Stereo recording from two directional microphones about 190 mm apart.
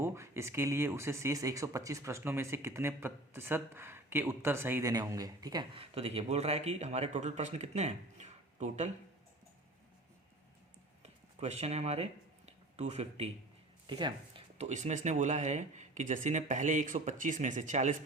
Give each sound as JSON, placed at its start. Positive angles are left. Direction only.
{"t": 0.0, "sound": "speech", "side_deg": -15}
{"t": 11.0, "sound": "a sound", "side_deg": -35}
{"t": 13.8, "sound": "speech", "side_deg": -25}